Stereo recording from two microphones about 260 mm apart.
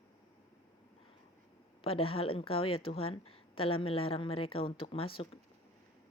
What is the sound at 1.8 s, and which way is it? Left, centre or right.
Speech, left.